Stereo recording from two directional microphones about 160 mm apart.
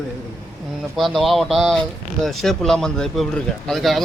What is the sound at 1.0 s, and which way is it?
Speech, centre (ahead or behind).